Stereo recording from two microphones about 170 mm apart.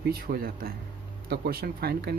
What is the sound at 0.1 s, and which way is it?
A man's voice, 60° right (ahead or behind).